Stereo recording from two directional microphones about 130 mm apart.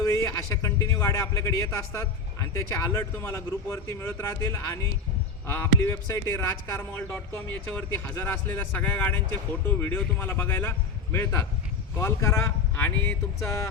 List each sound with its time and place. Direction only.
0.0 s speech: 25° left (ahead or behind)